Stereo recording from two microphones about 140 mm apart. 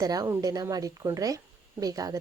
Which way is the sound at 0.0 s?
25° right (ahead or behind).